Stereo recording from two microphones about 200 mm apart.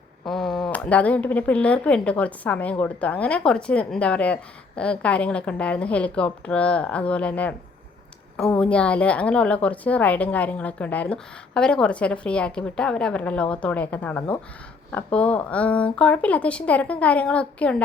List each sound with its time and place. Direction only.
0.3 s a woman's voice: centre (ahead or behind)